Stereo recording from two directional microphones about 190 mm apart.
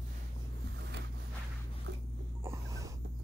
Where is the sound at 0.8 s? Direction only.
65° right (ahead or behind).